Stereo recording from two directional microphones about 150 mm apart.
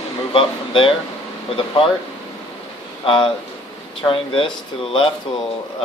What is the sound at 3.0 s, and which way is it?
Speech, 35° left (ahead or behind).